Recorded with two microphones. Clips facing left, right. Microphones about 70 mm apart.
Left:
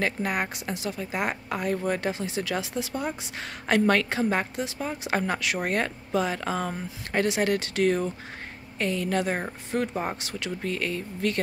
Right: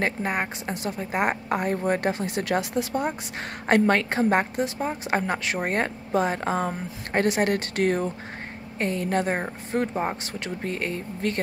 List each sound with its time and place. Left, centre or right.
0.0 s speech: right
0.7 s speech: right
3.8 s speech: right
4.1 s speech: right